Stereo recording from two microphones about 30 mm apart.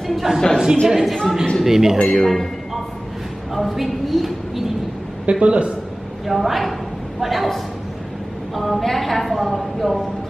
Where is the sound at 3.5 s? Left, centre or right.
Centre.